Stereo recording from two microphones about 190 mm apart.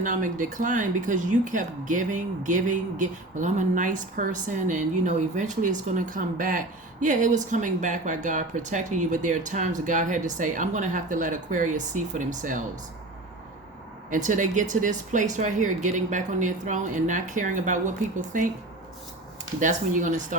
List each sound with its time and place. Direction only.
0.0 s speech: 45° right (ahead or behind)
14.1 s speech: 40° right (ahead or behind)
19.5 s speech: 45° right (ahead or behind)